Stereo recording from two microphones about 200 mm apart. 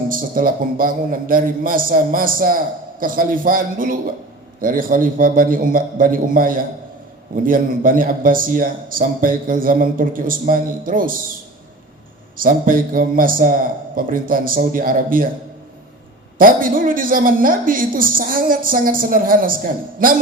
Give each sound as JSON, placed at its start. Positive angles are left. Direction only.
{"t": 0.1, "sound": "a man's voice", "side_deg": -45}
{"t": 12.4, "sound": "a man's voice", "side_deg": -45}
{"t": 16.4, "sound": "a man's voice", "side_deg": -45}